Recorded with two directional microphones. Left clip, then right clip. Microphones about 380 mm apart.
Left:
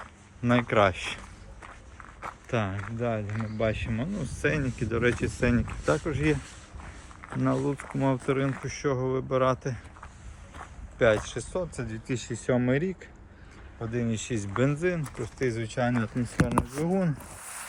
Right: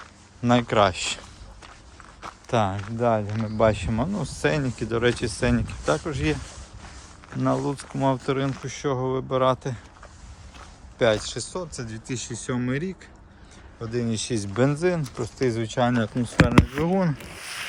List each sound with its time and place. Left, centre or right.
0.0 s speech: centre
2.2 s speech: centre
10.9 s speech: centre
12.4 s speech: right
13.8 s speech: centre